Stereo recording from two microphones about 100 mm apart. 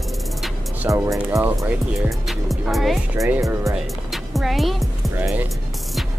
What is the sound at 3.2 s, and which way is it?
Speech, 35° right (ahead or behind).